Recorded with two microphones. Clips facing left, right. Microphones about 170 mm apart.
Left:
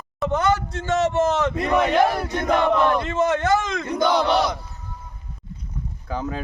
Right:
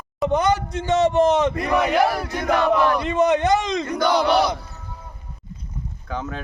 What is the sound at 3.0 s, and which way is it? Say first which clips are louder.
Speech: right 3 dB; 20° right (ahead or behind).